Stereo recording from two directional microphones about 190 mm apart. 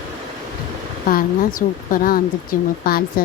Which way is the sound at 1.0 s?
45° left (ahead or behind).